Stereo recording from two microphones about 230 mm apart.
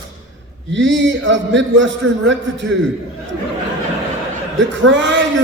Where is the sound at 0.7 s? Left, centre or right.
Right.